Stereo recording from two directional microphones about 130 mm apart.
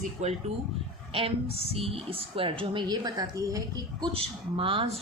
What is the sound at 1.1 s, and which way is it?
Speech, 45° right (ahead or behind).